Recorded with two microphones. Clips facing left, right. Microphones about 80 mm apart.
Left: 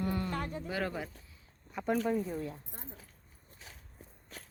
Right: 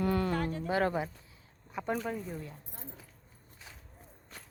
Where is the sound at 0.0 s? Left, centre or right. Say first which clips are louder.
Right 5 dB; right.